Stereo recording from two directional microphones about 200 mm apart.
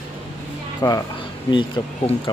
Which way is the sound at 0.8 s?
20° left (ahead or behind).